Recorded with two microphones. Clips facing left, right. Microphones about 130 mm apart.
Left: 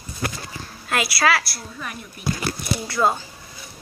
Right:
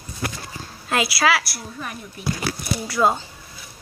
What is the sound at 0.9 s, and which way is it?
Speech, 25° right (ahead or behind).